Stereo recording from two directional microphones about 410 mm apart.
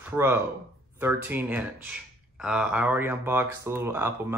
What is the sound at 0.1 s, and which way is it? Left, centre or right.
Speech, centre.